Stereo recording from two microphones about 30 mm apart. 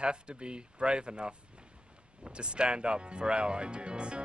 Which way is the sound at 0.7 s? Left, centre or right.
Right.